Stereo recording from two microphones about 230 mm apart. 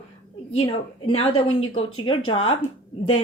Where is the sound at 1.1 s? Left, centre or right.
Left.